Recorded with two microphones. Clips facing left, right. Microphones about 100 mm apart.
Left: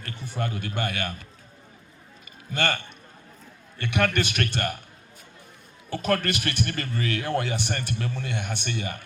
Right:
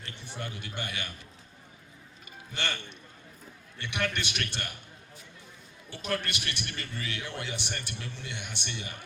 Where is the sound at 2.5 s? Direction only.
45° left (ahead or behind).